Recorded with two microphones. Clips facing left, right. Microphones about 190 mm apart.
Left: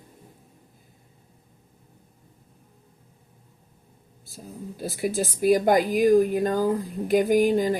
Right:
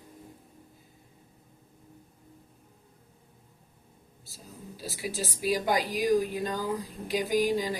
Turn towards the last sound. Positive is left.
turn(degrees=50)  # may be behind; listen again after turning